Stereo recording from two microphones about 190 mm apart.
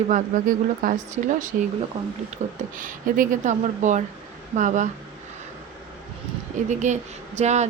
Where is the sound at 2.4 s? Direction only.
35° right (ahead or behind).